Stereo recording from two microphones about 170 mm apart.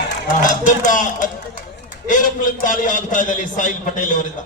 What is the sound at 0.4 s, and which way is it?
A man's voice, 50° left (ahead or behind).